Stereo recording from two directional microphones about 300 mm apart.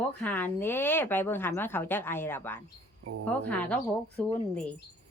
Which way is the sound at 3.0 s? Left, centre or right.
Right.